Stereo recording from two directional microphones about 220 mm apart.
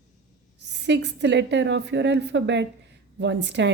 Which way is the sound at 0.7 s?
50° right (ahead or behind).